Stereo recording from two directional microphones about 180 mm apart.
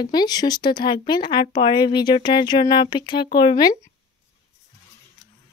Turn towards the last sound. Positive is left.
turn(degrees=25)  # may be behind; listen again after turning